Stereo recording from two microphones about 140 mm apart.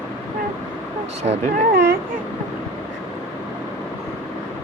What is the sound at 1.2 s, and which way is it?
Speech, 55° right (ahead or behind).